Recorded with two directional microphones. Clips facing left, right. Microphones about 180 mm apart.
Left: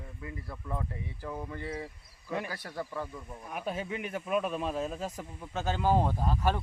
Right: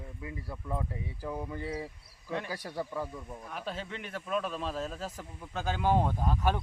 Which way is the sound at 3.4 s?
15° left (ahead or behind).